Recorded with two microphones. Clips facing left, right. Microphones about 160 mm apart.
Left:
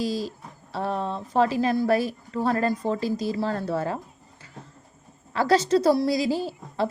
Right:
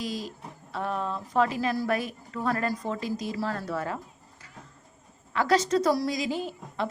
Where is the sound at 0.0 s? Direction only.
35° left (ahead or behind).